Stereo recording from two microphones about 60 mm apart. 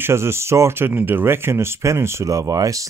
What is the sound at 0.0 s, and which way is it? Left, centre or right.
Speech, right.